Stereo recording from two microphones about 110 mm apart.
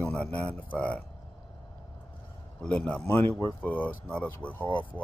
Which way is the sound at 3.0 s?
20° left (ahead or behind).